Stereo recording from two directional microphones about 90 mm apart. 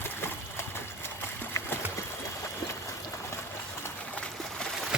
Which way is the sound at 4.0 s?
15° left (ahead or behind).